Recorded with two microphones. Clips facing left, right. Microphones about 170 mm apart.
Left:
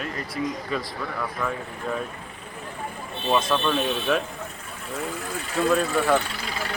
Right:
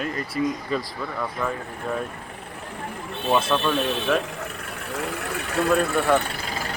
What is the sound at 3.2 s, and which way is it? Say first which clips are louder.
Speech: right 1 dB; centre (ahead or behind).